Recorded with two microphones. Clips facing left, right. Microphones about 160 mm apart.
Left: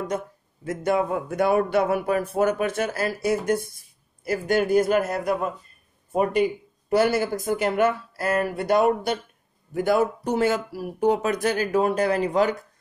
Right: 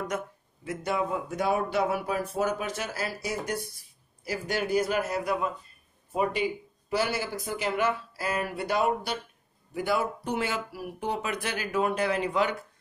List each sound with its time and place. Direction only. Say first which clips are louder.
0.1 s speech: left 4 dB; 30° left (ahead or behind)
0.7 s speech: left 6 dB; 50° left (ahead or behind)